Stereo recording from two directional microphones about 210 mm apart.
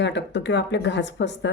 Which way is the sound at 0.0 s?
55° left (ahead or behind).